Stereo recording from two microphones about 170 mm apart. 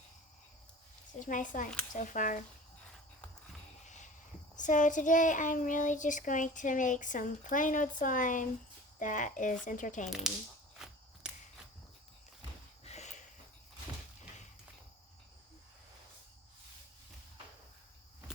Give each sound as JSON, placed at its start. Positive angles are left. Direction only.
{"t": 1.2, "sound": "a child's voice", "side_deg": 50}
{"t": 3.8, "sound": "a sound", "side_deg": 45}
{"t": 4.5, "sound": "a child's voice", "side_deg": 45}
{"t": 12.8, "sound": "snort", "side_deg": 40}